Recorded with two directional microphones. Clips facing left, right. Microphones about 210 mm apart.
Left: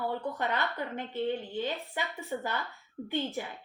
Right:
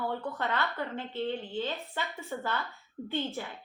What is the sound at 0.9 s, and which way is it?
A woman's voice, 15° left (ahead or behind).